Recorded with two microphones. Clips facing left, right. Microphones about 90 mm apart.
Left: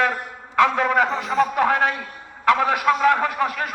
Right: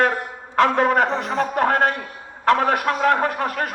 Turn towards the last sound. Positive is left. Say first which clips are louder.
# even
turn(degrees=-45)  # may be behind; listen again after turning